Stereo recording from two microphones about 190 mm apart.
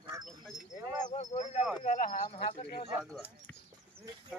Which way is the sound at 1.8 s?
40° left (ahead or behind).